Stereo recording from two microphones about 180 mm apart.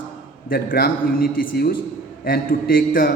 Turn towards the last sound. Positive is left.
turn(degrees=50)  # may be behind; listen again after turning